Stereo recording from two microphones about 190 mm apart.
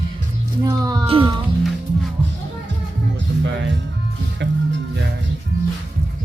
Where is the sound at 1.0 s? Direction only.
30° right (ahead or behind).